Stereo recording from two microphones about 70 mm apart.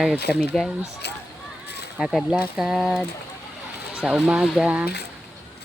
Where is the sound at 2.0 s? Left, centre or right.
Centre.